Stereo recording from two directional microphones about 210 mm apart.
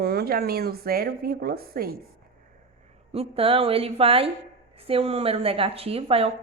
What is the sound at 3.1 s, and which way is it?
A woman's voice, 25° right (ahead or behind).